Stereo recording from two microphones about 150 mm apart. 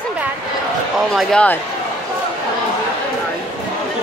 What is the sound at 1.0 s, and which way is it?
Speech, centre (ahead or behind).